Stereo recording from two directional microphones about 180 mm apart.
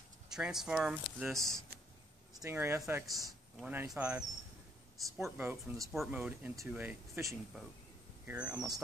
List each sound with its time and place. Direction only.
0.3 s speech: 5° right (ahead or behind)
2.4 s speech: 15° right (ahead or behind)
3.5 s speech: 5° right (ahead or behind)
5.4 s speech: 10° right (ahead or behind)